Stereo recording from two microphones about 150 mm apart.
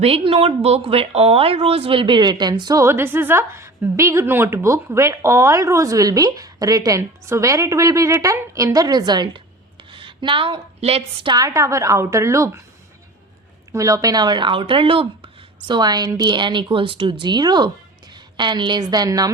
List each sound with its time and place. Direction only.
0.0 s speech: 40° right (ahead or behind)
11.3 s speech: 20° right (ahead or behind)
13.7 s speech: 20° right (ahead or behind)